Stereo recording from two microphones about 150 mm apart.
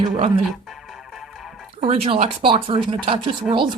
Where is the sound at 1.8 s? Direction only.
45° right (ahead or behind).